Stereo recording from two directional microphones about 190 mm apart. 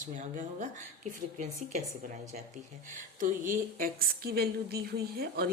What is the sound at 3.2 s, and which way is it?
A woman's voice, 45° right (ahead or behind).